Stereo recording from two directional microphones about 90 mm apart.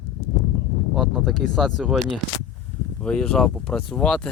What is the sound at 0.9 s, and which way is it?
Speech, centre (ahead or behind).